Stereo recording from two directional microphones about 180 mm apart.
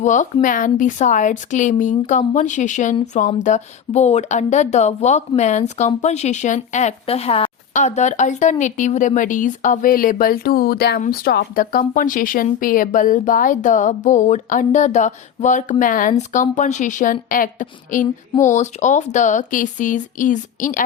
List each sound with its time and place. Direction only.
0.0 s speech: 45° left (ahead or behind)